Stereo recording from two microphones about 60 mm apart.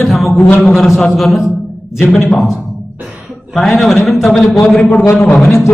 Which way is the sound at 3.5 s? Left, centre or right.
Centre.